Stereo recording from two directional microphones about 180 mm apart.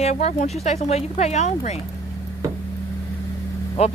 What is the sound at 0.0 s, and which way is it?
Speech, 40° left (ahead or behind).